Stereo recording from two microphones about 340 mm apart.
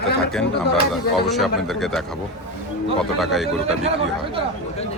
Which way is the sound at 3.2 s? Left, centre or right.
Centre.